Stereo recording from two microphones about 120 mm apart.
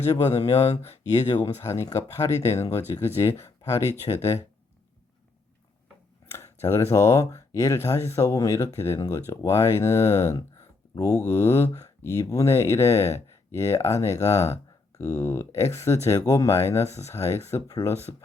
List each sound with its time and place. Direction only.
0.3 s speech: 65° left (ahead or behind)
1.6 s speech: 25° left (ahead or behind)
6.3 s speech: 20° left (ahead or behind)
18.1 s speech: 40° left (ahead or behind)